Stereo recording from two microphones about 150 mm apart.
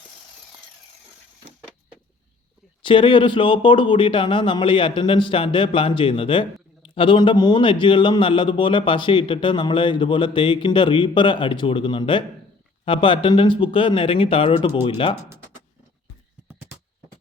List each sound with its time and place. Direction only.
2.8 s speech: 35° left (ahead or behind)